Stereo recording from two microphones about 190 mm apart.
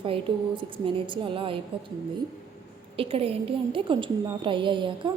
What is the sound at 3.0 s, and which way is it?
A woman's voice, 30° right (ahead or behind).